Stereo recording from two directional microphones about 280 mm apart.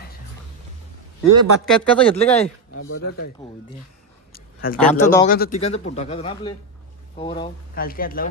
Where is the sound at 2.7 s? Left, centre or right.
Left.